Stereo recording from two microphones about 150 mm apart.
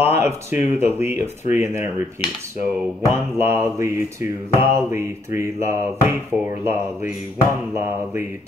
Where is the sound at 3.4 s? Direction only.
15° right (ahead or behind).